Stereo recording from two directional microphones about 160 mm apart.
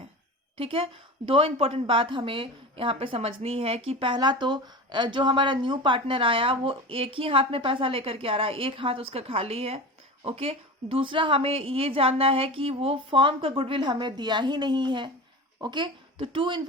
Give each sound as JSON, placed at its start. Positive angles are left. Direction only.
{"t": 0.5, "sound": "a woman's voice", "side_deg": -35}